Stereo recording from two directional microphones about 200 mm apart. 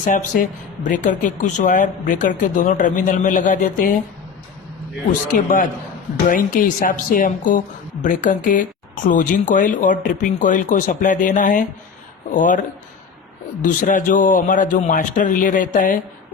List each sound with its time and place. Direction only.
0.0 s speech: 40° left (ahead or behind)
5.3 s a man's voice: 45° left (ahead or behind)
13.6 s speech: 40° left (ahead or behind)